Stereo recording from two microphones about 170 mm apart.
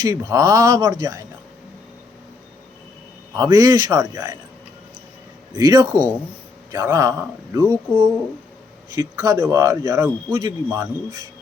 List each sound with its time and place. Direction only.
0.0 s speech: 20° right (ahead or behind)
3.3 s speech: 20° right (ahead or behind)
5.5 s speech: 20° right (ahead or behind)